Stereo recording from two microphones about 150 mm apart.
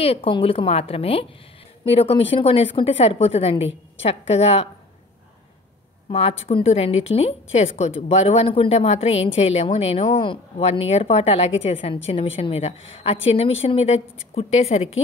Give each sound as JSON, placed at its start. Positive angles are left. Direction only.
{"t": 0.0, "sound": "a woman's voice", "side_deg": 40}
{"t": 6.0, "sound": "a woman's voice", "side_deg": 40}